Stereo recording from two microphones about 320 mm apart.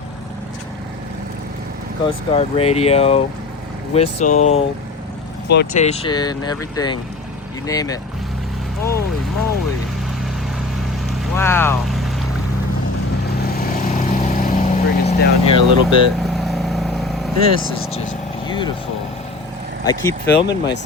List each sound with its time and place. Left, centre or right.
2.3 s speech: centre
11.3 s speech: centre
13.4 s vehicle: left
16.2 s vehicle: centre
18.4 s vehicle: centre
19.8 s speech: centre